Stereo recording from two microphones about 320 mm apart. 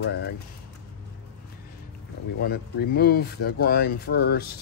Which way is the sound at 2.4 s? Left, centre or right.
Left.